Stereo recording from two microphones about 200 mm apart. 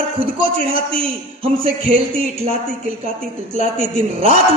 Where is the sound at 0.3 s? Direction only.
25° right (ahead or behind).